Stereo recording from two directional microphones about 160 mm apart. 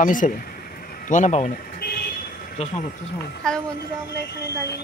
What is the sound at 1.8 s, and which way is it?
Vehicle, 75° left (ahead or behind).